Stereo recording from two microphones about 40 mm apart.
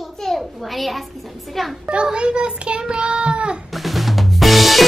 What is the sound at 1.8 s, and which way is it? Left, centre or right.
A child's voice, right.